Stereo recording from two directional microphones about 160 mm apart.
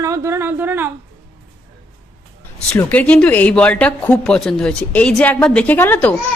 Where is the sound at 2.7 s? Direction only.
10° left (ahead or behind).